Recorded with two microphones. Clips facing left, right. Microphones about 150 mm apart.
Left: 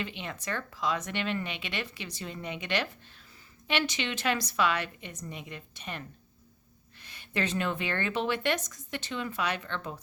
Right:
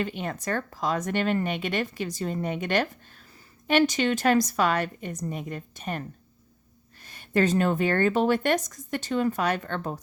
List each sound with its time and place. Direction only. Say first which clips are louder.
0.0 s speech: right 7 dB; 45° right (ahead or behind)